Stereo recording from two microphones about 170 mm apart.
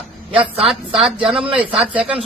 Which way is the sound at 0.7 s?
Centre (ahead or behind).